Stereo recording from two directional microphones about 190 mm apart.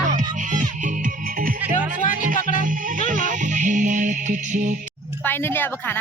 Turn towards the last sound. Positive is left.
turn(degrees=10)  # may be behind; listen again after turning